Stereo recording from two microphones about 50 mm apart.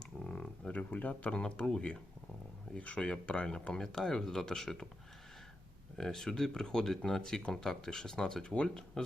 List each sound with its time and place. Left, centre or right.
0.0 s a sound: centre
0.7 s speech: left; by 4.9 s centre
6.0 s speech: centre